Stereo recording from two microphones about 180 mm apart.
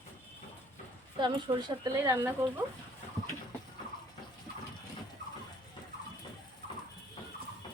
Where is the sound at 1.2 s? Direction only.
25° right (ahead or behind).